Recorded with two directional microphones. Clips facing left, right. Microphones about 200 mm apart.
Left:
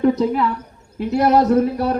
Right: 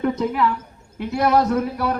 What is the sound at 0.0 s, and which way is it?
A man's voice, 35° left (ahead or behind).